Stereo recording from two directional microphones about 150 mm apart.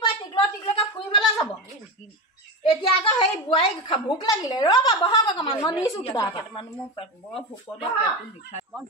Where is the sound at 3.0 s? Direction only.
35° left (ahead or behind).